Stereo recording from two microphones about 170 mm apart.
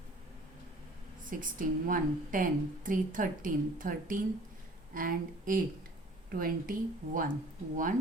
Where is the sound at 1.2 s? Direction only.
55° right (ahead or behind).